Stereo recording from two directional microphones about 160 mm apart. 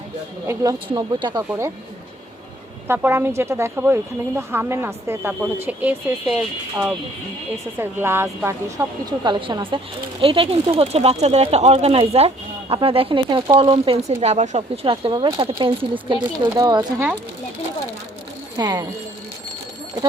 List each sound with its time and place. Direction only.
0.4 s speech: 20° right (ahead or behind)
2.8 s speech: 15° right (ahead or behind)
9.2 s speech: 30° right (ahead or behind)
18.5 s speech: 25° right (ahead or behind)